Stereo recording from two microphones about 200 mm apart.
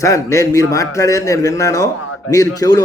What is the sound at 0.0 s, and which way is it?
A man's voice, 15° left (ahead or behind).